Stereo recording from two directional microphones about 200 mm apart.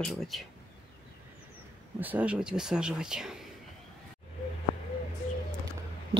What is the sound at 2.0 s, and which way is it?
Speech, 5° right (ahead or behind).